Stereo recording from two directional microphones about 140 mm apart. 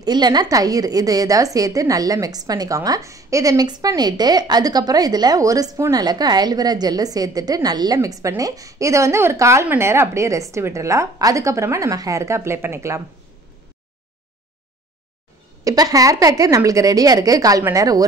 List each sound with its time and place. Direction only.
0.0 s a woman's voice: 30° right (ahead or behind)
15.6 s a woman's voice: 25° right (ahead or behind)